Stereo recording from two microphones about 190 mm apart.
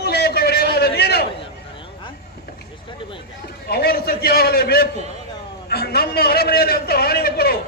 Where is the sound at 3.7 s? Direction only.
55° left (ahead or behind).